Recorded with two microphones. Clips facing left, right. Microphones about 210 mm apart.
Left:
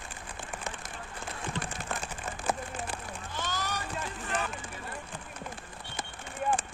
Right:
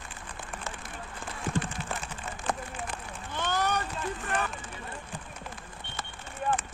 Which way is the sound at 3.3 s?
60° right (ahead or behind).